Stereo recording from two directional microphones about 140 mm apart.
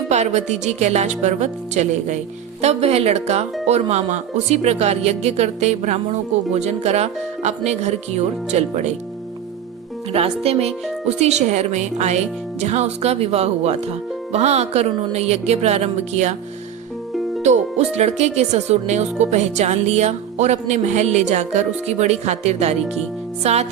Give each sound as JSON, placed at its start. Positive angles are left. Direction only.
{"t": 0.1, "sound": "music", "side_deg": -55}
{"t": 2.6, "sound": "speech", "side_deg": -50}
{"t": 10.1, "sound": "speech", "side_deg": -45}
{"t": 17.4, "sound": "speech", "side_deg": -55}